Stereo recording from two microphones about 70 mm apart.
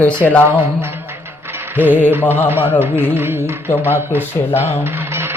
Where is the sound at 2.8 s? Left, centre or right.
Right.